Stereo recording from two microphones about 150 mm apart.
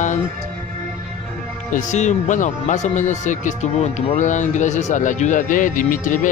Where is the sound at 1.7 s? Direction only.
55° left (ahead or behind).